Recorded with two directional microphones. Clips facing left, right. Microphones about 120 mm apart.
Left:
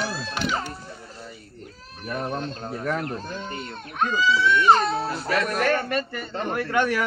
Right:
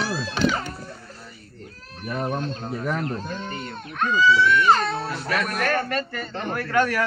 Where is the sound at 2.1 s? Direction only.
10° right (ahead or behind).